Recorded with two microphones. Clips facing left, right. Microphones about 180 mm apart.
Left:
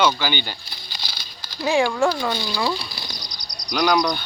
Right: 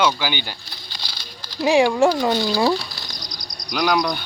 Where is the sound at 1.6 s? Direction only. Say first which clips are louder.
Right 4 dB; 20° right (ahead or behind).